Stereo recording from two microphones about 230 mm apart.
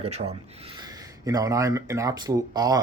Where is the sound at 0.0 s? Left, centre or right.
Right.